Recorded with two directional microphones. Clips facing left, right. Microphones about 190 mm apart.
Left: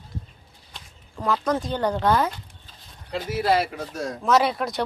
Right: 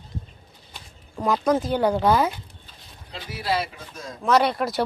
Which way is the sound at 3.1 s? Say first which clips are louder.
Left 5 dB; 50° left (ahead or behind).